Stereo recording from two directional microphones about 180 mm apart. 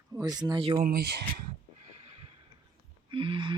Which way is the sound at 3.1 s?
30° right (ahead or behind).